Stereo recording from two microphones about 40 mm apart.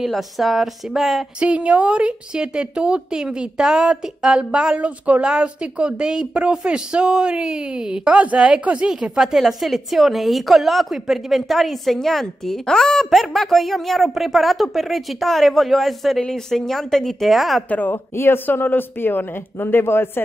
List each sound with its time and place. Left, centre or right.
0.0 s a woman's voice: centre
1.4 s speech: right
4.7 s a woman's voice: right
5.2 s speech: right
8.1 s a woman's voice: right
8.8 s a woman's voice: centre
17.2 s a woman's voice: centre
17.6 s speech: left
18.1 s speech: left